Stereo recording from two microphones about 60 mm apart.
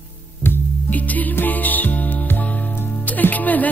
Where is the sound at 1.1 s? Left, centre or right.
Left.